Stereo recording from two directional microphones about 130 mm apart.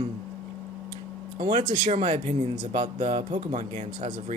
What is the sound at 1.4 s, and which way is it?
Speech, 90° right.